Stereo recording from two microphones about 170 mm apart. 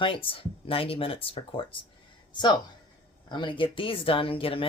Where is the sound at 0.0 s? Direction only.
30° left (ahead or behind).